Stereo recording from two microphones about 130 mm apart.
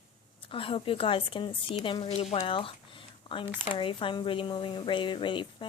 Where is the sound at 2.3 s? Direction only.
45° left (ahead or behind).